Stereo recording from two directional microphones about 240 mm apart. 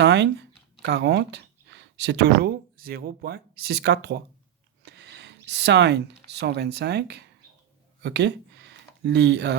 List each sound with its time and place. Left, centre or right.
0.0 s speech: right